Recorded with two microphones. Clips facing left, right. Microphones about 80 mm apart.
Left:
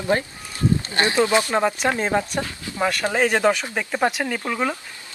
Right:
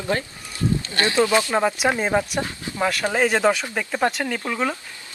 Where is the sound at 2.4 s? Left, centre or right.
Right.